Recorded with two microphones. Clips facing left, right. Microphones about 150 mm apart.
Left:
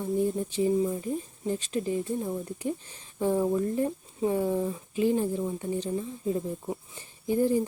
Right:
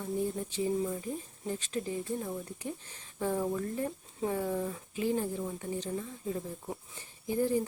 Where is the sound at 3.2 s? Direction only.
20° left (ahead or behind).